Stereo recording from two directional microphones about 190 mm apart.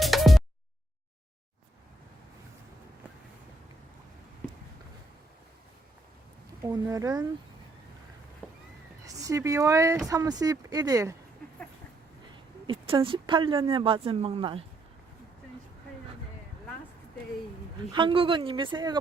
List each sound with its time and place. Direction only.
0.0 s a sound: centre (ahead or behind)
6.7 s speech: 15° right (ahead or behind)
9.0 s speech: 15° right (ahead or behind)
12.6 s speech: 30° right (ahead or behind)
17.9 s speech: 25° right (ahead or behind)